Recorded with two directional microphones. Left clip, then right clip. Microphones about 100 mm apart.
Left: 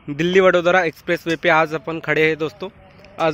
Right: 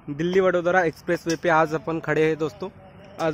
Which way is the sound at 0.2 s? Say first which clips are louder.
Left 6 dB; 35° left (ahead or behind).